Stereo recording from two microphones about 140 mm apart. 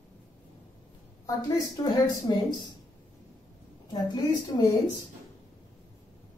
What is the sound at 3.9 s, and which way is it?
Speech, 30° left (ahead or behind).